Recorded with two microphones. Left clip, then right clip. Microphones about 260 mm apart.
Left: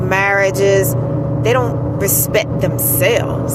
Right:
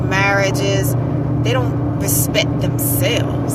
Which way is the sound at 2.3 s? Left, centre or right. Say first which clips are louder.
Left 2 dB; left.